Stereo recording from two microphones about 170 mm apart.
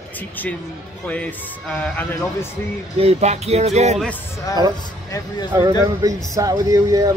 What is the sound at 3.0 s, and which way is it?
Speech, 40° right (ahead or behind).